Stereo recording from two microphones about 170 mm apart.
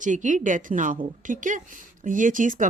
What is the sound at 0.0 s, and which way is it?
Speech, 50° right (ahead or behind).